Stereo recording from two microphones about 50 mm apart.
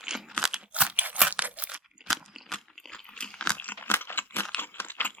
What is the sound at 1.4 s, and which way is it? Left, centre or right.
Crunch, right.